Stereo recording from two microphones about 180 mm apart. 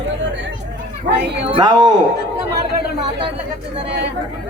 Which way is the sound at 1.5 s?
25° right (ahead or behind).